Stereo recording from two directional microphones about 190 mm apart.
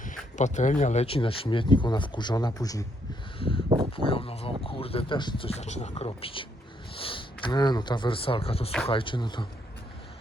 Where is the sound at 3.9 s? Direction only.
30° left (ahead or behind).